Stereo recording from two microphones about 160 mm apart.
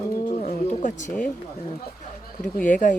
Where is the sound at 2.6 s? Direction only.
55° left (ahead or behind).